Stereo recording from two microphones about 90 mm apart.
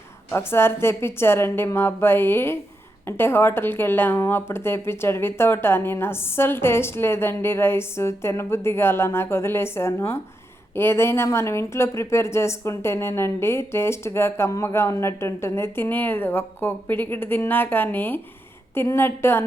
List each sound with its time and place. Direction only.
0.3 s speech: 30° left (ahead or behind)